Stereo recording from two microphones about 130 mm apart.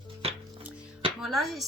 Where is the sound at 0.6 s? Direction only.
10° right (ahead or behind).